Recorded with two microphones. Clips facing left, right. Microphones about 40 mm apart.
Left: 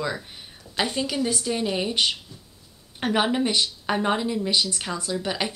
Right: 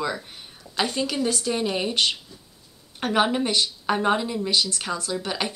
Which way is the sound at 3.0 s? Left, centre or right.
Centre.